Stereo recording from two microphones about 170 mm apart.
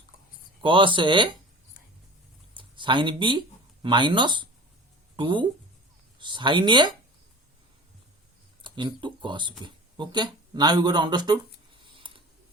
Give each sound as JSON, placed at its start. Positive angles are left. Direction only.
{"t": 0.6, "sound": "speech", "side_deg": -30}
{"t": 2.6, "sound": "speech", "side_deg": -30}
{"t": 8.6, "sound": "speech", "side_deg": -30}
{"t": 11.9, "sound": "a sound", "side_deg": -30}